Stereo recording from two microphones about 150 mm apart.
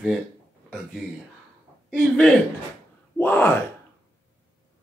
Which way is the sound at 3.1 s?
10° left (ahead or behind).